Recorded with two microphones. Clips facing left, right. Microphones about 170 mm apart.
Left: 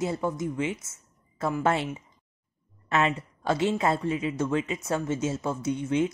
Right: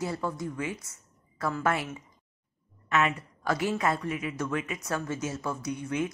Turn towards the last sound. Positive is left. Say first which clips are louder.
# left 5 dB
turn(degrees=25)  # may be behind; listen again after turning